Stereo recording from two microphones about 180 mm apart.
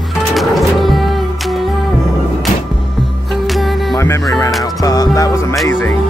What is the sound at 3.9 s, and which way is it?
Music, 15° left (ahead or behind).